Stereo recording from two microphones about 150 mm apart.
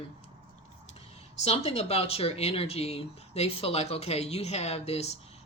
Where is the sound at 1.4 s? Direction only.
45° left (ahead or behind).